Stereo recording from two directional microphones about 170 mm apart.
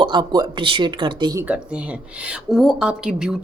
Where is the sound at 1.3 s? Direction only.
10° right (ahead or behind).